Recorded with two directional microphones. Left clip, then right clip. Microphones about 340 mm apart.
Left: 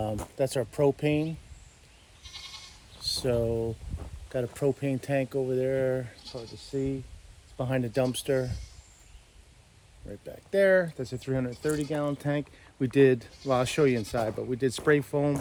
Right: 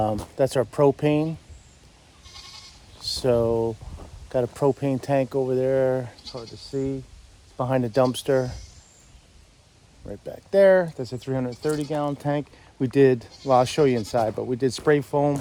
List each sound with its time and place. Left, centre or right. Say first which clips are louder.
0.3 s speech: right 6 dB; right
3.0 s speech: right 6 dB; centre
10.1 s speech: right 6 dB; centre